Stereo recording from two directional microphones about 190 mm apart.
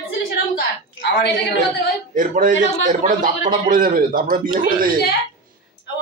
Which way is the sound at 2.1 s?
45° right (ahead or behind).